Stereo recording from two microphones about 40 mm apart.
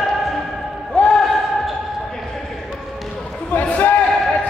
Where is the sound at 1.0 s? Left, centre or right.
Left.